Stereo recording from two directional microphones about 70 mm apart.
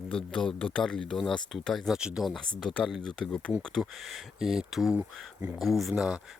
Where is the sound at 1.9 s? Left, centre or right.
Centre.